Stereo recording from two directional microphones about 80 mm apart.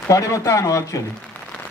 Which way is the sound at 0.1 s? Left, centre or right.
Left.